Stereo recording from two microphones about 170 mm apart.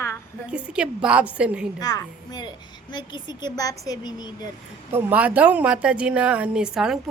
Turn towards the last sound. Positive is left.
turn(degrees=-5)  # may be behind; listen again after turning